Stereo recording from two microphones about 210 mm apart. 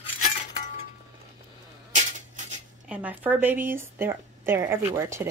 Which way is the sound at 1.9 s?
35° right (ahead or behind).